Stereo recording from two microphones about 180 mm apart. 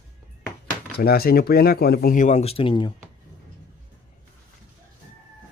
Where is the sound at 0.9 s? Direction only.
60° left (ahead or behind); by 2.9 s 30° left (ahead or behind).